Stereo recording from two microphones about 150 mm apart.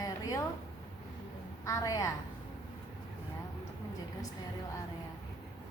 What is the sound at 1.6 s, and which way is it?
Speech, 20° left (ahead or behind).